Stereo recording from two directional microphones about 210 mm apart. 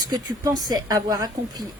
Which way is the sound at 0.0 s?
20° right (ahead or behind).